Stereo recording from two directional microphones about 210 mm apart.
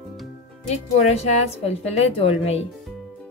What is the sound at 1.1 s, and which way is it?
A woman's voice, 30° left (ahead or behind).